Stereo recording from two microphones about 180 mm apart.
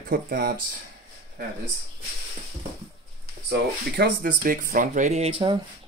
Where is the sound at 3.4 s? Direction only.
65° right (ahead or behind).